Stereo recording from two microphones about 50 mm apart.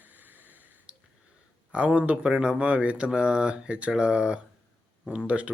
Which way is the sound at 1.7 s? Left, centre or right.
Right.